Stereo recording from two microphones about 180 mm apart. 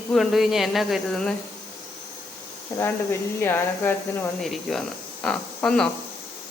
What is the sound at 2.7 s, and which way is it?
Speech, 20° left (ahead or behind).